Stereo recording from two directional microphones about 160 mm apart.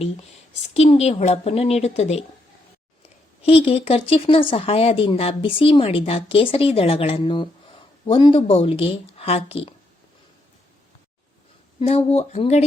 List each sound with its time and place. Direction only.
0.7 s speech: 40° left (ahead or behind)
3.4 s speech: 35° left (ahead or behind)
11.8 s speech: 40° left (ahead or behind)